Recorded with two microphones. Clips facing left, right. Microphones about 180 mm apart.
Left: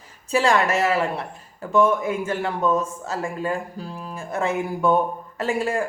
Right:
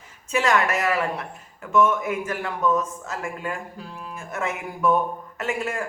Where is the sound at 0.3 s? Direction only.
30° left (ahead or behind).